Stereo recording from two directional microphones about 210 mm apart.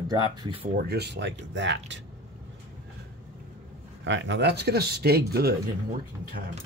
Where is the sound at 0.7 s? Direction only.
50° right (ahead or behind).